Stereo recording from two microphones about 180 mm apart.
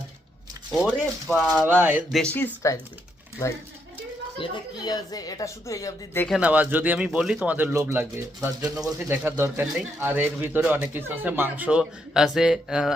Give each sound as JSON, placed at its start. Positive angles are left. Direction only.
{"t": 0.7, "sound": "speech", "side_deg": -5}
{"t": 2.1, "sound": "speech", "side_deg": 10}
{"t": 4.4, "sound": "speech", "side_deg": 25}
{"t": 6.2, "sound": "speech", "side_deg": -5}